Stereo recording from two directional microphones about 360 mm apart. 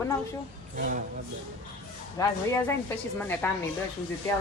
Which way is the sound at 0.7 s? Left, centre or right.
Right.